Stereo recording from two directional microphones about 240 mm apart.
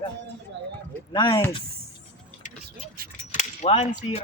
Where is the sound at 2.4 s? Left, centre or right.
Left.